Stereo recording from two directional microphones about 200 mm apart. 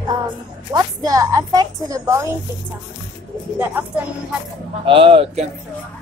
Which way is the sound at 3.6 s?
10° right (ahead or behind).